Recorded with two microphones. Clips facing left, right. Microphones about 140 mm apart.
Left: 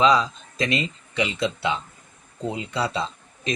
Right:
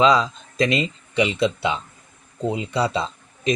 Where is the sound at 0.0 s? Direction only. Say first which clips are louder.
Right 2 dB; 20° right (ahead or behind).